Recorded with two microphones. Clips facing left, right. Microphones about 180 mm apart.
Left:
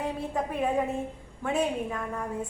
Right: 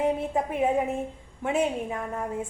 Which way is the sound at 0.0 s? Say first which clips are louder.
Right 5 dB; 20° right (ahead or behind).